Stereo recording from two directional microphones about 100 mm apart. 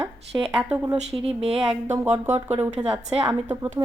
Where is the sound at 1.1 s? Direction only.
85° right.